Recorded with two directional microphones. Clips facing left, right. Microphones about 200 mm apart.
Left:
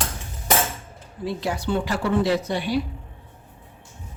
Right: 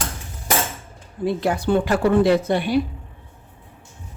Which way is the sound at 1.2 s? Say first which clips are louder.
Right 5 dB; 55° right (ahead or behind).